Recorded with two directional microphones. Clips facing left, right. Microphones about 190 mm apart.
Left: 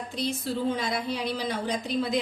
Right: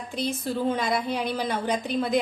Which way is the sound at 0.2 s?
55° right (ahead or behind).